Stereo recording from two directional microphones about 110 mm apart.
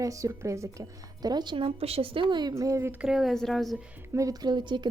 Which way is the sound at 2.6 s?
30° right (ahead or behind).